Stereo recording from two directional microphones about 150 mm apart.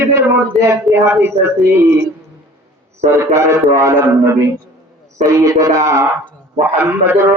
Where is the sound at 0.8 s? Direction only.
15° right (ahead or behind).